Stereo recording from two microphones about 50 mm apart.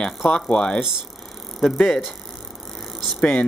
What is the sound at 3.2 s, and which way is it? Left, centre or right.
Speech, left.